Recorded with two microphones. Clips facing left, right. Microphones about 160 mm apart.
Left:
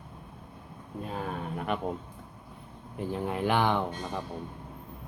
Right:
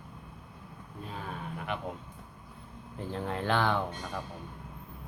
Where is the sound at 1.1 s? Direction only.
45° left (ahead or behind).